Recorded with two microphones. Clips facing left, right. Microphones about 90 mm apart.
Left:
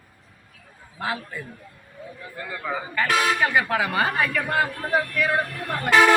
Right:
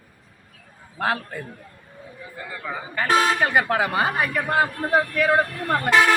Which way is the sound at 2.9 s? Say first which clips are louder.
Right 2 dB; 30° right (ahead or behind).